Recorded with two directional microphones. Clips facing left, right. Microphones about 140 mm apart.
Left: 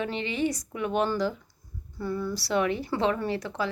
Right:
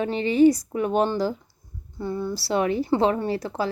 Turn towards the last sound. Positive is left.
turn(degrees=-35)  # may be behind; listen again after turning